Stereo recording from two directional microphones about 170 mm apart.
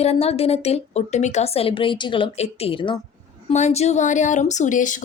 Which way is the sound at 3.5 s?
40° left (ahead or behind).